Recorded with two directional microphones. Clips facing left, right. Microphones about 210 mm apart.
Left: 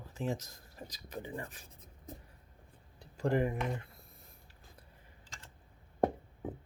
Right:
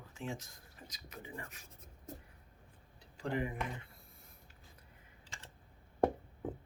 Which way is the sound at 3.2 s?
45° left (ahead or behind).